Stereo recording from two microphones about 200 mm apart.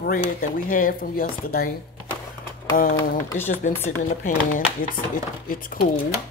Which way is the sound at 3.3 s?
10° left (ahead or behind).